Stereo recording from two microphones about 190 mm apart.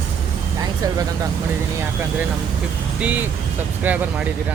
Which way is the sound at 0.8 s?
20° right (ahead or behind).